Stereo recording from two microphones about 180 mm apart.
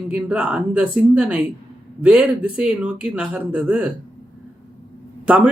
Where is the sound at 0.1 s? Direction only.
5° right (ahead or behind).